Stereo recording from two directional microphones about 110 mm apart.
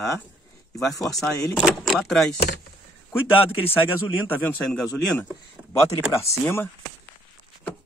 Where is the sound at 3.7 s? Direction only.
20° left (ahead or behind).